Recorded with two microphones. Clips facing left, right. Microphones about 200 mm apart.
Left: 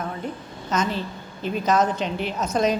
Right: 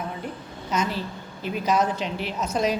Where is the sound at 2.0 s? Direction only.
5° right (ahead or behind).